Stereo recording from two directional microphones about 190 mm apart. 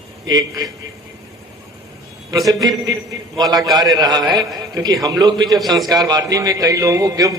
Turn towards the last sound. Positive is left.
turn(degrees=-20)  # may be behind; listen again after turning